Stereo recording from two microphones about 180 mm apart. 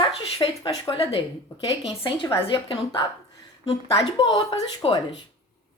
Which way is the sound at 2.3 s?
30° left (ahead or behind).